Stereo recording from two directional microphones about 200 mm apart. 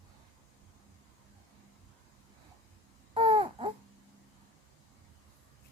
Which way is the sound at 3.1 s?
25° right (ahead or behind).